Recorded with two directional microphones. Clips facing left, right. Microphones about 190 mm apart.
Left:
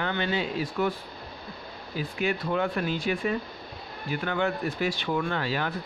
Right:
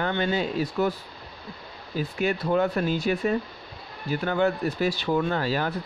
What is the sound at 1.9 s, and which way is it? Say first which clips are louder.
Speech: right 3 dB; 40° right (ahead or behind).